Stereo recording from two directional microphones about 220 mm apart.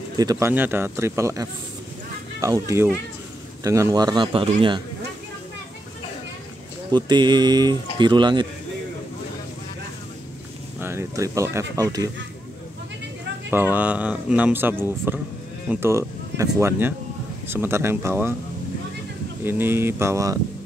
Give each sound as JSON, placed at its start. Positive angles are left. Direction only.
{"t": 0.2, "sound": "speech", "side_deg": -15}
{"t": 7.1, "sound": "speech", "side_deg": -20}
{"t": 10.8, "sound": "a sound", "side_deg": -10}
{"t": 11.7, "sound": "speech", "side_deg": -15}
{"t": 13.5, "sound": "speech", "side_deg": -10}
{"t": 19.4, "sound": "speech", "side_deg": -10}